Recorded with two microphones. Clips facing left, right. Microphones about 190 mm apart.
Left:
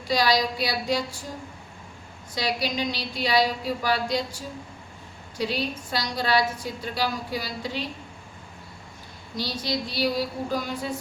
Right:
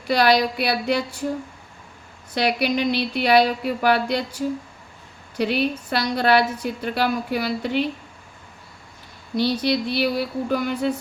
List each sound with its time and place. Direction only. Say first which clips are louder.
0.1 s a woman's voice: right 5 dB; 60° right (ahead or behind)
2.3 s a woman's voice: right 6 dB; 60° right (ahead or behind)
9.3 s a woman's voice: right 8 dB; 60° right (ahead or behind)